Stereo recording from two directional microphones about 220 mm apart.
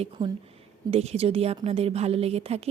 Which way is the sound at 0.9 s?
25° right (ahead or behind).